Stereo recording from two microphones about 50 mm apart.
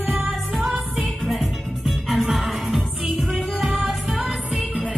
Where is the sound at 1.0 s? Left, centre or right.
Centre.